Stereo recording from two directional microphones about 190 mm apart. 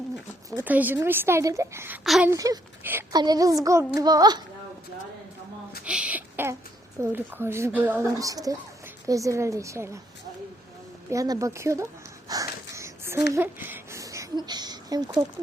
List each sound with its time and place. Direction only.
0.5 s speech: 10° right (ahead or behind)
2.0 s speech: centre (ahead or behind)
2.3 s a child's voice: 15° right (ahead or behind)
5.8 s a sound: 5° right (ahead or behind)
7.0 s speech: 10° right (ahead or behind)
11.1 s speech: 15° right (ahead or behind)
12.3 s a sound: 15° right (ahead or behind)